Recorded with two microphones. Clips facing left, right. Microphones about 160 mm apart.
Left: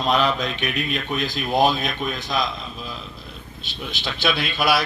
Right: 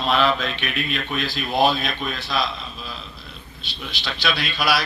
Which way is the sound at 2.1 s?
15° left (ahead or behind).